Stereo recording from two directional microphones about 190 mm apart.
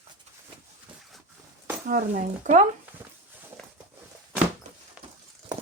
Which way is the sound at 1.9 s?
45° right (ahead or behind).